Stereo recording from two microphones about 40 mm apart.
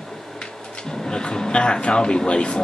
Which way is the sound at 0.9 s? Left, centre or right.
Centre.